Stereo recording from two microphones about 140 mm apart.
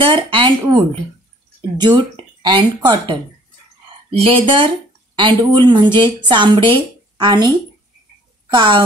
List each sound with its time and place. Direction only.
0.0 s a woman's voice: 35° right (ahead or behind)
5.1 s a woman's voice: 30° right (ahead or behind)
8.5 s a woman's voice: 35° right (ahead or behind)